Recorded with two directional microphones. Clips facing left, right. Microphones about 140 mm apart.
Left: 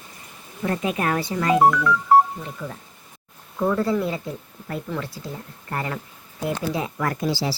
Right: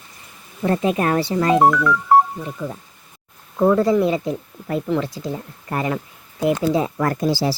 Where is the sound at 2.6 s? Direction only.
15° right (ahead or behind).